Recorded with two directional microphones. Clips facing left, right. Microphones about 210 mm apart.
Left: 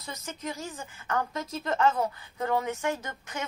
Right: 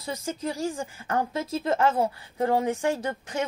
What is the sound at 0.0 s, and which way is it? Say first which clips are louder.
A woman's voice: right 7 dB; 30° right (ahead or behind).